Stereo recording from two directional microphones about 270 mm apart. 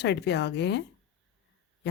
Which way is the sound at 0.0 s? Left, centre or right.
Left.